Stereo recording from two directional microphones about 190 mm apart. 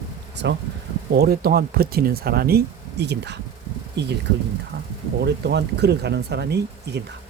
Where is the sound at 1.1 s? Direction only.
55° right (ahead or behind).